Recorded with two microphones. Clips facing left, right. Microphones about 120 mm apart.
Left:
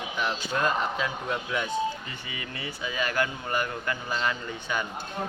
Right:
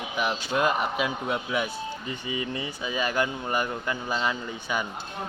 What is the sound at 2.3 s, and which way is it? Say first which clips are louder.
A man's voice: right 7 dB; 20° right (ahead or behind).